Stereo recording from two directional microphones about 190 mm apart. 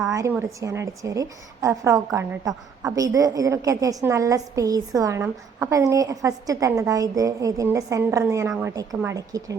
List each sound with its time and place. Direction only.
0.1 s a woman's voice: 15° right (ahead or behind)